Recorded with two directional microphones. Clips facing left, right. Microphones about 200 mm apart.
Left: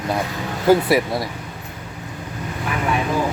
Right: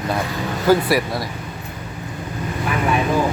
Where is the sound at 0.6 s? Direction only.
20° left (ahead or behind).